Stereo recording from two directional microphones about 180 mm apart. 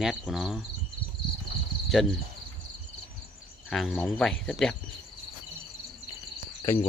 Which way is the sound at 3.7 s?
Centre (ahead or behind).